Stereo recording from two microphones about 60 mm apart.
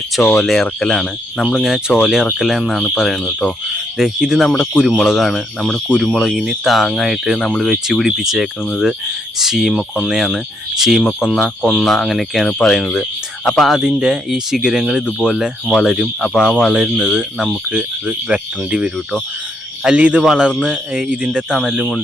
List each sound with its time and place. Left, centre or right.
0.3 s speech: centre
1.5 s speech: centre
17.7 s speech: centre
21.6 s speech: centre